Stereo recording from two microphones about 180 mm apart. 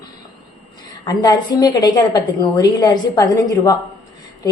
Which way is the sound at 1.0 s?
25° left (ahead or behind).